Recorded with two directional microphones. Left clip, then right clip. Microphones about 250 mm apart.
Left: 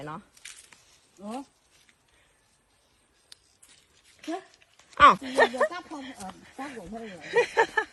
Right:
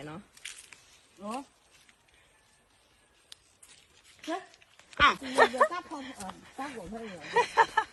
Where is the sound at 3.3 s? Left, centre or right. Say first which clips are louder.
Even; centre.